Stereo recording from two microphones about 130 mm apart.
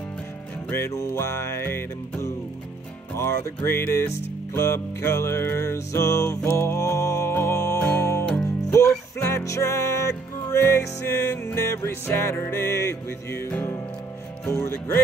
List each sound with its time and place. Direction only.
0.7 s music: 20° left (ahead or behind)